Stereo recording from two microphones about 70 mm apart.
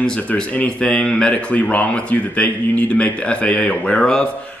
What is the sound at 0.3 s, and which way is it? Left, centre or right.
A man's voice, centre.